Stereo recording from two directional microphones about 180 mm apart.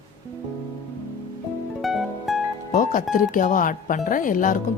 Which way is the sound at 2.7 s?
45° left (ahead or behind).